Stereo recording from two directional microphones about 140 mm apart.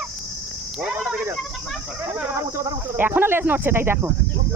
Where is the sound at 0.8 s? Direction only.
5° right (ahead or behind).